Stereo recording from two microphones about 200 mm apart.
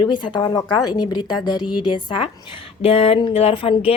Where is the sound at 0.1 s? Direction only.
20° left (ahead or behind).